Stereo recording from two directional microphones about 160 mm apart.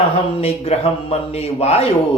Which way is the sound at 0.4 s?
40° left (ahead or behind).